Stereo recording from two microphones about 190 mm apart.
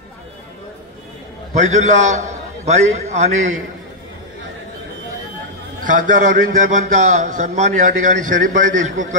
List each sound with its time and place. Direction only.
1.6 s a man's voice: 40° right (ahead or behind)
5.9 s a man's voice: 45° right (ahead or behind)